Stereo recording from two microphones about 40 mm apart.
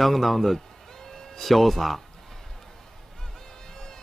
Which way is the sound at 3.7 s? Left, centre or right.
Centre.